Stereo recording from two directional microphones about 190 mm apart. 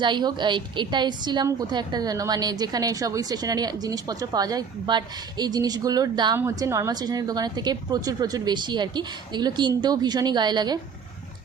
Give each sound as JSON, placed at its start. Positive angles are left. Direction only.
{"t": 0.0, "sound": "a woman's voice", "side_deg": -25}